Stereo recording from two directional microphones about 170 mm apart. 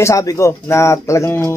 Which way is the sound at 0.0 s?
15° left (ahead or behind).